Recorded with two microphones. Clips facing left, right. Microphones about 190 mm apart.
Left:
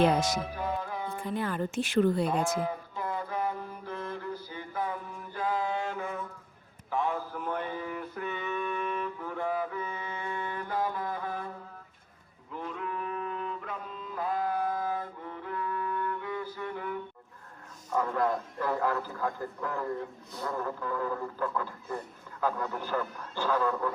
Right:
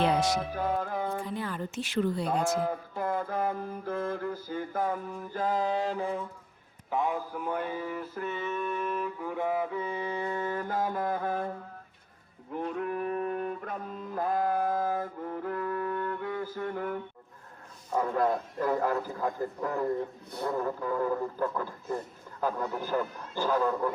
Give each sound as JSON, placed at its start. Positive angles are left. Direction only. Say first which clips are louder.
{"t": 0.0, "sound": "speech", "louder": "left 1 dB", "side_deg": 45}
{"t": 0.5, "sound": "music", "louder": "right 3 dB", "side_deg": -50}
{"t": 1.2, "sound": "speech", "louder": "left 3 dB", "side_deg": 55}
{"t": 2.6, "sound": "mantra", "louder": "right 3 dB", "side_deg": -50}
{"t": 6.9, "sound": "a sound", "louder": "right 1 dB", "side_deg": -15}
{"t": 7.3, "sound": "music", "louder": "right 2 dB", "side_deg": -10}
{"t": 12.6, "sound": "music", "louder": "right 4 dB", "side_deg": -45}
{"t": 17.9, "sound": "a sound", "louder": "right 1 dB", "side_deg": -40}
{"t": 18.6, "sound": "speech", "louder": "right 2 dB", "side_deg": -45}
{"t": 20.3, "sound": "a sound", "louder": "right 4 dB", "side_deg": -30}
{"t": 21.0, "sound": "speech", "louder": "right 4 dB", "side_deg": -40}
{"t": 22.7, "sound": "speech", "louder": "right 2 dB", "side_deg": -15}